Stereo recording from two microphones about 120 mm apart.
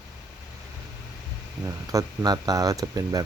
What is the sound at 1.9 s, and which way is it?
Speech, 30° right (ahead or behind).